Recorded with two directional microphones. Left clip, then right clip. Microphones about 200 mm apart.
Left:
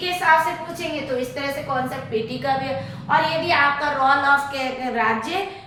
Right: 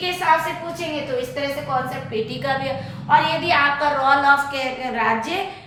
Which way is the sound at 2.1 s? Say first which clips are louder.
Left 1 dB; 15° right (ahead or behind).